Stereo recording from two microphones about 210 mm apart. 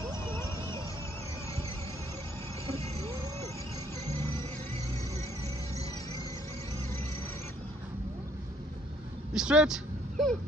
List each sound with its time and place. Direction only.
0.0 s a sound: 20° right (ahead or behind)
2.6 s vehicle: 30° right (ahead or behind)
4.0 s music: 30° right (ahead or behind)
9.3 s speech: 5° right (ahead or behind)